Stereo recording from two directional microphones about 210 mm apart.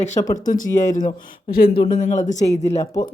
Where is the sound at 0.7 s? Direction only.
35° left (ahead or behind).